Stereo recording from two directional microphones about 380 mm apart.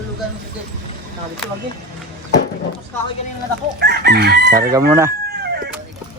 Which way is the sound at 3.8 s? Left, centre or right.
Right.